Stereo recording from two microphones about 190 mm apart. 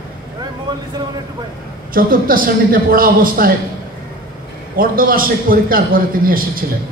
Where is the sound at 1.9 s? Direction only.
50° right (ahead or behind).